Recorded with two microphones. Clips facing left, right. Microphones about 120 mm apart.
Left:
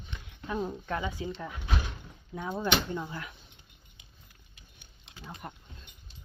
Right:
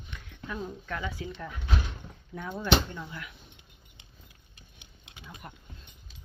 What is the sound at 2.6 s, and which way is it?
Speech, 30° left (ahead or behind).